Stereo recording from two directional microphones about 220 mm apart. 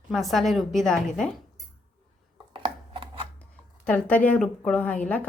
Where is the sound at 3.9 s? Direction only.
5° left (ahead or behind).